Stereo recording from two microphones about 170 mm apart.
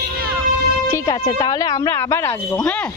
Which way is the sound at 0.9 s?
20° left (ahead or behind).